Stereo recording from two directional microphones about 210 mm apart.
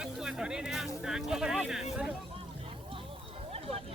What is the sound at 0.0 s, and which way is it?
Speech, 5° right (ahead or behind).